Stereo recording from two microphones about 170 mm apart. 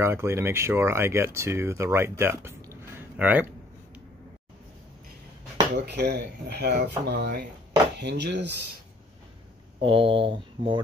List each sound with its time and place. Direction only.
0.0 s speech: 15° right (ahead or behind)
5.8 s speech: 75° right (ahead or behind)
8.0 s speech: 80° right
9.8 s speech: 30° right (ahead or behind)